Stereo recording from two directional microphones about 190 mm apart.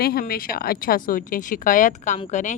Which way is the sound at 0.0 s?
55° left (ahead or behind).